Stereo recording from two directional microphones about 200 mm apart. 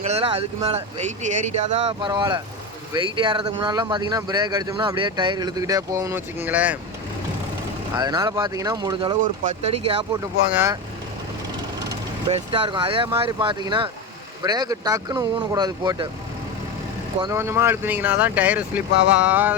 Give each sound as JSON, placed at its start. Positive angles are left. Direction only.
{"t": 0.0, "sound": "speech", "side_deg": -30}
{"t": 7.9, "sound": "speech", "side_deg": -20}
{"t": 9.2, "sound": "speech", "side_deg": -35}
{"t": 10.5, "sound": "speech", "side_deg": -10}
{"t": 12.3, "sound": "speech", "side_deg": -25}
{"t": 17.2, "sound": "speech", "side_deg": -15}